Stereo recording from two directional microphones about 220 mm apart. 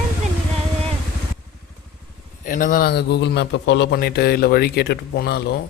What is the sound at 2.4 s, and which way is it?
A man's voice, 40° left (ahead or behind).